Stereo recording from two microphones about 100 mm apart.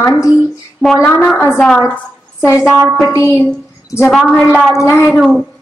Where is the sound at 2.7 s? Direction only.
25° right (ahead or behind).